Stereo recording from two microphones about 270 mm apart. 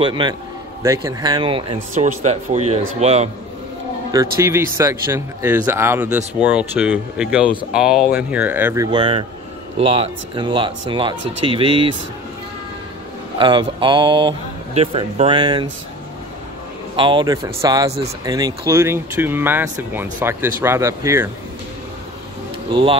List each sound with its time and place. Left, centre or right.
0.0 s speech: centre
4.1 s speech: centre
13.4 s speech: centre
16.9 s speech: centre
22.7 s speech: centre